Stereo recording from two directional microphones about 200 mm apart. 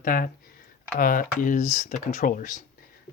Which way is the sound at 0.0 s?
45° left (ahead or behind).